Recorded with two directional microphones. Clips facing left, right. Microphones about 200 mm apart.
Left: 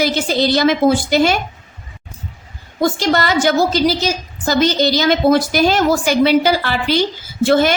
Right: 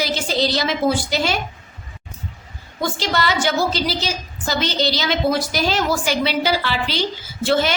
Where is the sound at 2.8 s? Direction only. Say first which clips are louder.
Left 6 dB; 45° left (ahead or behind).